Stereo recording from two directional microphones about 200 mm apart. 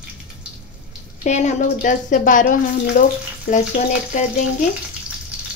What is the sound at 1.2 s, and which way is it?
Speech, 35° left (ahead or behind).